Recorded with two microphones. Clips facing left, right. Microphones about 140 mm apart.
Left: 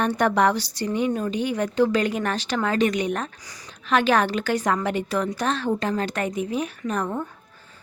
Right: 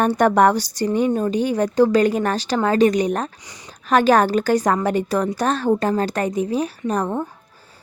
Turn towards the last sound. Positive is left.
turn(degrees=-35)  # may be behind; listen again after turning